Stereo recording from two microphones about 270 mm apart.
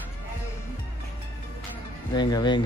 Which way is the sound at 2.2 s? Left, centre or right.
Centre.